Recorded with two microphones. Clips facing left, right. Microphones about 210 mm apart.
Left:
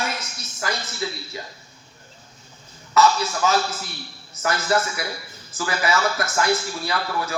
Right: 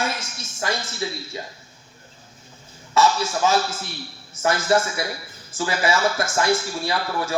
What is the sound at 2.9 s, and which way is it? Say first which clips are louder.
A man's voice: left 1 dB; 25° right (ahead or behind).